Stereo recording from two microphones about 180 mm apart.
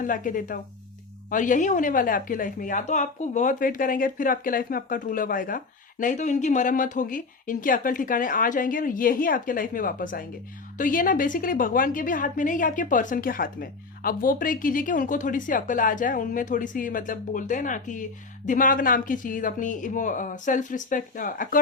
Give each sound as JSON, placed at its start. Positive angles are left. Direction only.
{"t": 0.0, "sound": "a woman's voice", "side_deg": 50}